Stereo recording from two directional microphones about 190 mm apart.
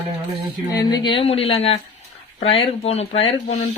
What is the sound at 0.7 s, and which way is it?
Speech, 20° left (ahead or behind).